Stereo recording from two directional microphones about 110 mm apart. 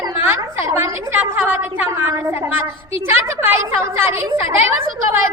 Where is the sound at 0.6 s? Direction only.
25° right (ahead or behind).